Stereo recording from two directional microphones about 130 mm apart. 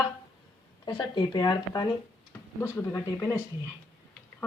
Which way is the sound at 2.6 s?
20° left (ahead or behind).